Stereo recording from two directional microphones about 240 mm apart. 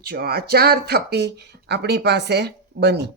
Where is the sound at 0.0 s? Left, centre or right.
Right.